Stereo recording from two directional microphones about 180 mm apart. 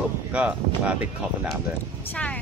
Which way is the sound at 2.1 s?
10° left (ahead or behind).